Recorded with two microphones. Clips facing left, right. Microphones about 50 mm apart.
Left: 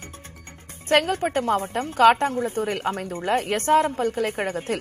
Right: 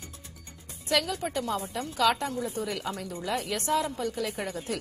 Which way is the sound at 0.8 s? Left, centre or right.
Left.